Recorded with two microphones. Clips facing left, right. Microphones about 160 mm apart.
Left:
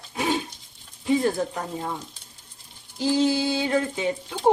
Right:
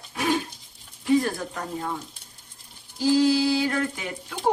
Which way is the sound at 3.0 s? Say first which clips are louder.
Right 2 dB; 20° left (ahead or behind).